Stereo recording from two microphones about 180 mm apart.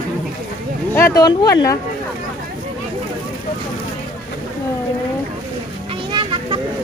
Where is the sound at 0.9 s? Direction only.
15° left (ahead or behind).